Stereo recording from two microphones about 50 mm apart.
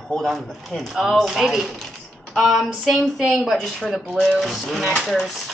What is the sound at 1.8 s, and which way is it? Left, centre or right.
Speech, centre.